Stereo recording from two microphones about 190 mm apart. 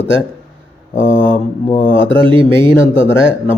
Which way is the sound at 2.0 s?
25° right (ahead or behind).